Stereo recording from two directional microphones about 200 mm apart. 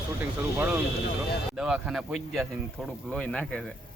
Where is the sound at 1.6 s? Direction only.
5° right (ahead or behind).